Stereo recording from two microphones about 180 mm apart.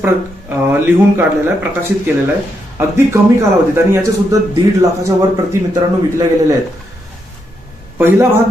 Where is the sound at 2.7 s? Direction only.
15° right (ahead or behind).